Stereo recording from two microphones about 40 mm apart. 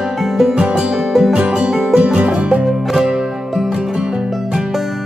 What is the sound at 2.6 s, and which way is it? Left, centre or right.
Music, centre.